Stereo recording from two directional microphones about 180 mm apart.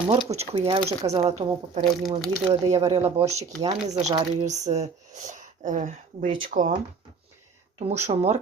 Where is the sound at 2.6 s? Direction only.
20° right (ahead or behind).